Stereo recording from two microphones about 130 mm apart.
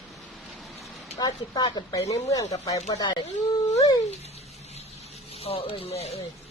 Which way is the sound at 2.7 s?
55° left (ahead or behind).